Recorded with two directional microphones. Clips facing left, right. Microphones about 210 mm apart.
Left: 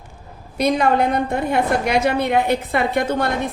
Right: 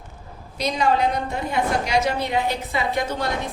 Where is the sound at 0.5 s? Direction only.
55° left (ahead or behind).